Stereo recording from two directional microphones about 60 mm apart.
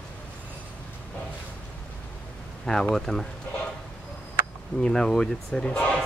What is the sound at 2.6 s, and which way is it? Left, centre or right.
Speech, centre.